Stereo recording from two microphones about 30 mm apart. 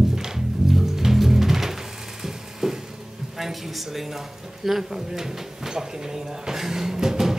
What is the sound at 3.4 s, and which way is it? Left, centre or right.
Speech, centre.